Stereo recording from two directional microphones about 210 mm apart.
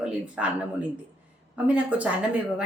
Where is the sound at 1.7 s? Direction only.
5° right (ahead or behind).